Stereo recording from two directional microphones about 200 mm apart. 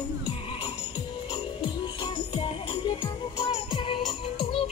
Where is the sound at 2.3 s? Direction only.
25° left (ahead or behind).